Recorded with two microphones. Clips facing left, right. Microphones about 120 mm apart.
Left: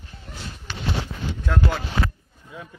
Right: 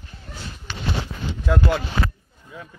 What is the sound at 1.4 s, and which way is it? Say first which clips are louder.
Speech: right 4 dB; 5° right (ahead or behind).